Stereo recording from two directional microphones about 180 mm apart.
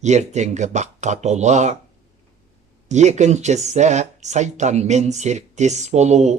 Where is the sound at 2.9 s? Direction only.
40° right (ahead or behind).